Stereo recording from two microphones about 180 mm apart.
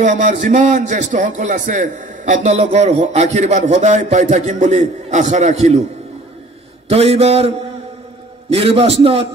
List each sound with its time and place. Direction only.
0.0 s a man's voice: 45° right (ahead or behind)
6.9 s a man's voice: 35° right (ahead or behind)